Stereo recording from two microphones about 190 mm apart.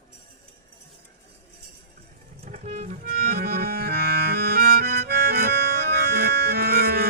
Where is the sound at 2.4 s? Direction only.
35° right (ahead or behind).